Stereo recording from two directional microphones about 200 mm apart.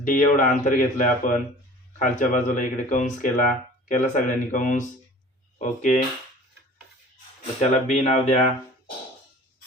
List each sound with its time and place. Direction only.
0.0 s speech: 40° left (ahead or behind)
7.6 s speech: 35° left (ahead or behind)